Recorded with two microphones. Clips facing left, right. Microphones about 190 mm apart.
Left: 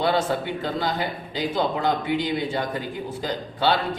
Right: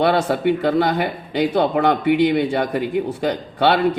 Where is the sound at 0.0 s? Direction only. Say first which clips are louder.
Right 6 dB; 65° right (ahead or behind).